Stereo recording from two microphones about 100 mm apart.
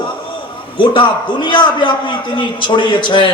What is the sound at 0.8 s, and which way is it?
A man's voice, 50° left (ahead or behind).